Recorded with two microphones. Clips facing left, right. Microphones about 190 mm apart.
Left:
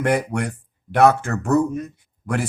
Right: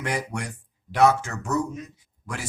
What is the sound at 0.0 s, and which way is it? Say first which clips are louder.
Speech: left 9 dB; 55° left (ahead or behind).